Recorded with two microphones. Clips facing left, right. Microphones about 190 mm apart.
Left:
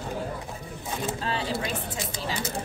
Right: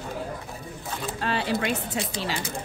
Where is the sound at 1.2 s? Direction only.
65° right (ahead or behind).